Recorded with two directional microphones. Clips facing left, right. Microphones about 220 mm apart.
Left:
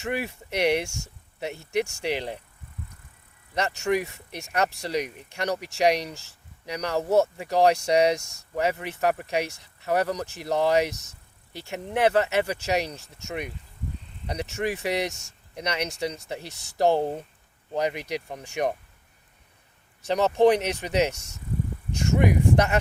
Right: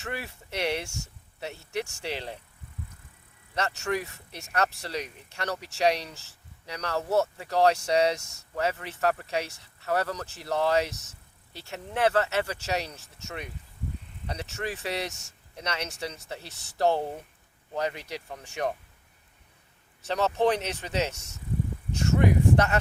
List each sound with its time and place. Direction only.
0.0 s speech: 15° left (ahead or behind)
3.5 s speech: 15° left (ahead or behind)
20.1 s speech: 15° left (ahead or behind)